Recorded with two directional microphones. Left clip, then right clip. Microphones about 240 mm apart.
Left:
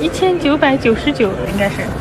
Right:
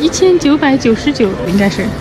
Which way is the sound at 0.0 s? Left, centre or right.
Centre.